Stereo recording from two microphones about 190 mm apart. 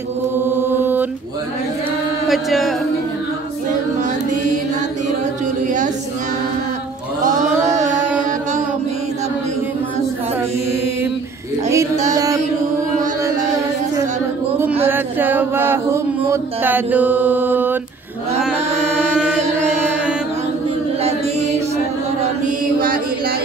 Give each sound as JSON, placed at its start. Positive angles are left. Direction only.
{"t": 0.6, "sound": "mantra", "side_deg": -10}
{"t": 2.2, "sound": "music", "side_deg": 0}
{"t": 7.2, "sound": "chant", "side_deg": -40}
{"t": 11.7, "sound": "a sound", "side_deg": -15}
{"t": 14.9, "sound": "chant", "side_deg": -10}